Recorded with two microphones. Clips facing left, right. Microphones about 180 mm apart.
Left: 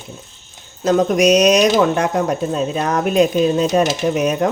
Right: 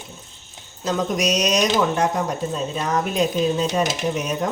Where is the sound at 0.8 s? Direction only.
55° left (ahead or behind).